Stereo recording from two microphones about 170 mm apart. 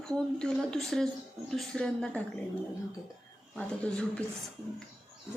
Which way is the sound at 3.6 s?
5° left (ahead or behind).